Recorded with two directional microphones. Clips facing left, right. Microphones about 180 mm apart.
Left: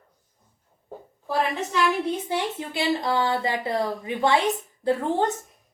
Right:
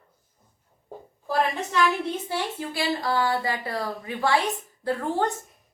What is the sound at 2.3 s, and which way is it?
Speech, 20° left (ahead or behind).